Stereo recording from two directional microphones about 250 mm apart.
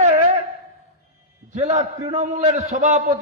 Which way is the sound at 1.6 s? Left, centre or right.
Right.